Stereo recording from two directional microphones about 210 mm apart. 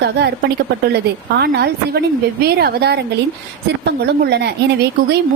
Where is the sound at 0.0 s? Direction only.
50° right (ahead or behind).